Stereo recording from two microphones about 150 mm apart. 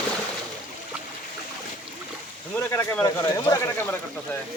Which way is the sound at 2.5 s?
15° left (ahead or behind).